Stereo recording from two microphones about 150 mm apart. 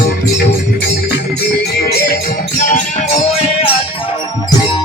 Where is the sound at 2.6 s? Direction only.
55° left (ahead or behind).